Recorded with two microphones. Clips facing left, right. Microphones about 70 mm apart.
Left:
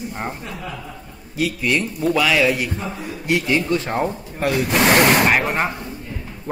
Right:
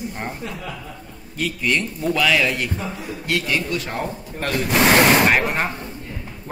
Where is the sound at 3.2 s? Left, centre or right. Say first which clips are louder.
Left 4 dB; left.